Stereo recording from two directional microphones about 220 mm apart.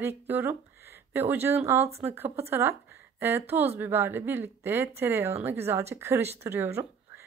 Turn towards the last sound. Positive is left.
turn(degrees=-10)  # may be behind; listen again after turning